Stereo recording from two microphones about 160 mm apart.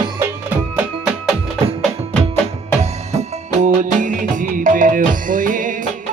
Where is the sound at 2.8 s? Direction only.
45° right (ahead or behind).